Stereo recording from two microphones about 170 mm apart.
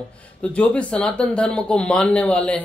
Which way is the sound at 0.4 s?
5° left (ahead or behind).